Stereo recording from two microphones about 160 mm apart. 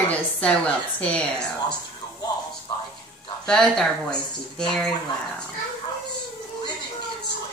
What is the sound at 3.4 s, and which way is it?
Speech, 5° left (ahead or behind).